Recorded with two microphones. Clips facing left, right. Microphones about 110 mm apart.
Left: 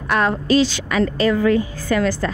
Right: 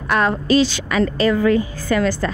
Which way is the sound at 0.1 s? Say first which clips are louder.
Right 1 dB; 20° right (ahead or behind).